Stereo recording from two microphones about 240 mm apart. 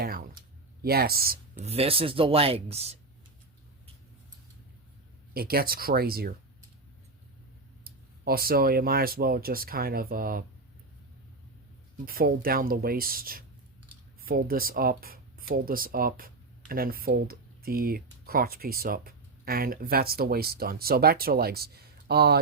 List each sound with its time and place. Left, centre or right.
0.0 s a sound: right
0.8 s speech: right
5.3 s speech: right
7.9 s speech: right
12.0 s speech: right